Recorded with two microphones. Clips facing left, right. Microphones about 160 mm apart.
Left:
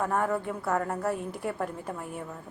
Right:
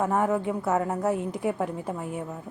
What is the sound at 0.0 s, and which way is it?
A woman's voice, 15° right (ahead or behind).